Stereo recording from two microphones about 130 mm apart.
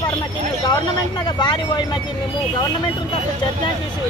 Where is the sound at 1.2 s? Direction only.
35° left (ahead or behind).